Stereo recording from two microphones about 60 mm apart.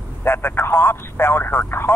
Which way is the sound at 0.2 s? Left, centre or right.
Left.